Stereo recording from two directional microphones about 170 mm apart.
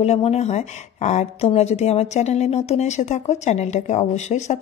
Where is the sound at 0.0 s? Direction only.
40° left (ahead or behind).